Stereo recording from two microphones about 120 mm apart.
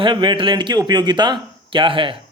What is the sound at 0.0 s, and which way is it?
Speech, 40° right (ahead or behind).